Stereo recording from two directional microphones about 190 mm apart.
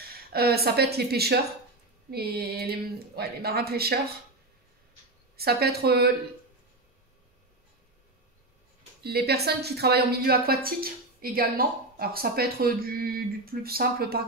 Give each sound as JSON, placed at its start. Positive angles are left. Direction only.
{"t": 0.1, "sound": "a woman's voice", "side_deg": -55}
{"t": 5.4, "sound": "speech", "side_deg": -55}
{"t": 9.0, "sound": "a woman's voice", "side_deg": -55}